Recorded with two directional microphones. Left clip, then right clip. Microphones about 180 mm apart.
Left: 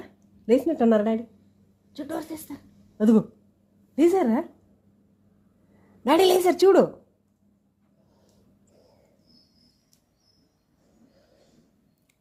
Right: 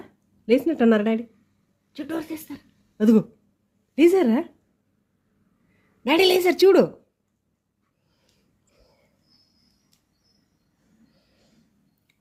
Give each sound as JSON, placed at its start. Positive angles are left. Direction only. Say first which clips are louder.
{"t": 0.0, "sound": "a woman's voice", "louder": "even", "side_deg": -20}
{"t": 6.1, "sound": "a woman's voice", "louder": "right 1 dB", "side_deg": -5}